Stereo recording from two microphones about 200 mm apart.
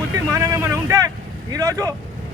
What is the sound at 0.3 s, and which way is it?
Vehicle, 15° right (ahead or behind).